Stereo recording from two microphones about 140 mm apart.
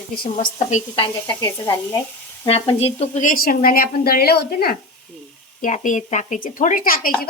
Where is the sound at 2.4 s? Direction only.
45° left (ahead or behind).